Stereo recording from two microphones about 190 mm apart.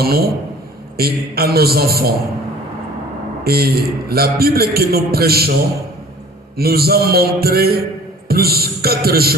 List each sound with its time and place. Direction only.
0.0 s a man's voice: 55° right (ahead or behind)
3.4 s a man's voice: 55° right (ahead or behind)
6.6 s a man's voice: 55° right (ahead or behind)